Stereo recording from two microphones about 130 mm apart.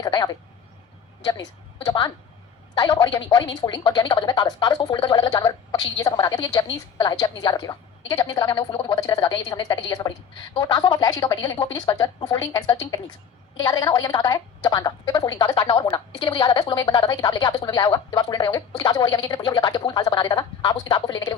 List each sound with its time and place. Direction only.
0.0 s a woman's voice: 30° left (ahead or behind)